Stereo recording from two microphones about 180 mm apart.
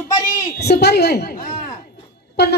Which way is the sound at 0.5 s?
65° left (ahead or behind).